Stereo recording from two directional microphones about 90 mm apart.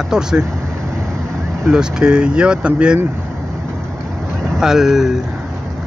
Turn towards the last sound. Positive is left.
turn(degrees=-5)  # may be behind; listen again after turning